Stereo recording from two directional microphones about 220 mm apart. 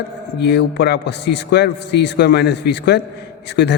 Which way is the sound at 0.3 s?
50° left (ahead or behind).